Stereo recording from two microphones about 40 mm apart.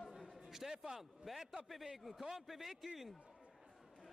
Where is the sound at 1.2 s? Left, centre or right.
Centre.